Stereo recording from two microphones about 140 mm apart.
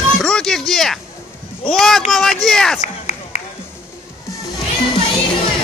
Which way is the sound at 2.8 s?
55° left (ahead or behind).